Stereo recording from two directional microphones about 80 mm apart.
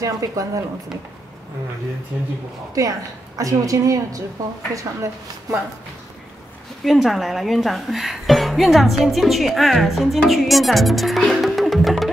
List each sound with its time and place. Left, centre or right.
0.0 s a woman's voice: right
2.1 s speech: right
2.7 s a woman's voice: right
6.8 s speech: centre